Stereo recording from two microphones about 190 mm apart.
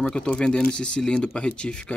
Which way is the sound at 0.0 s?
5° left (ahead or behind).